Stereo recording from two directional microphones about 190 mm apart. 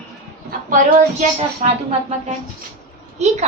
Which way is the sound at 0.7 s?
40° right (ahead or behind).